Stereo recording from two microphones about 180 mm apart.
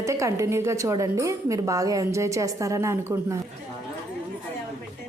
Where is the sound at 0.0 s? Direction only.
15° right (ahead or behind).